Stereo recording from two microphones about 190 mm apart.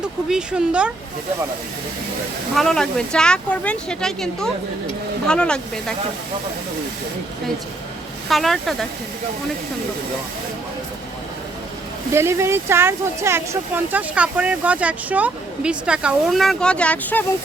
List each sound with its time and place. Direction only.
0.3 s speech: 5° right (ahead or behind)
2.6 s speech: centre (ahead or behind)
8.3 s speech: centre (ahead or behind)
12.1 s speech: 15° right (ahead or behind); by 17.2 s 10° left (ahead or behind)